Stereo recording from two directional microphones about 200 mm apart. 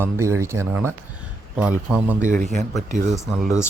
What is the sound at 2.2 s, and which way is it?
Speech, 40° right (ahead or behind).